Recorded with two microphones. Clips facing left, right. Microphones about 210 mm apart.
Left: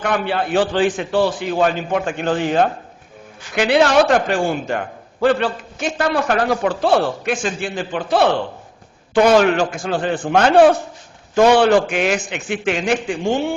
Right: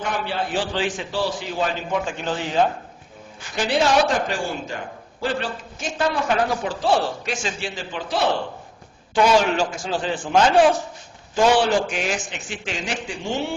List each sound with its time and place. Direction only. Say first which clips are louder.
0.0 s a man's voice: left 6 dB; 65° left (ahead or behind)